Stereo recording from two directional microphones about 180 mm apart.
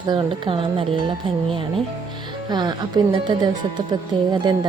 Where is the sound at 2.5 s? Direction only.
25° right (ahead or behind).